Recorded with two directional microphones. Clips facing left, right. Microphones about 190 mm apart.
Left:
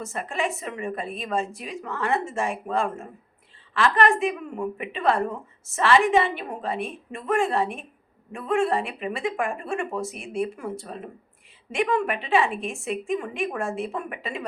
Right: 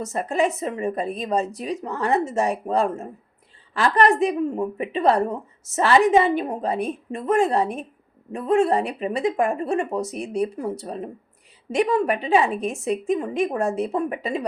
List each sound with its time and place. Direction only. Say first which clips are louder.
0.0 s a woman's voice: right 6 dB; 40° right (ahead or behind)